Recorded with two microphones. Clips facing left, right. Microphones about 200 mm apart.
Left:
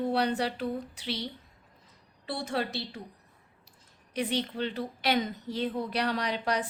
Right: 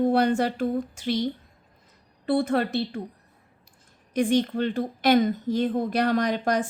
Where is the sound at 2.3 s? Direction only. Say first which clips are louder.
Right 9 dB; 55° right (ahead or behind).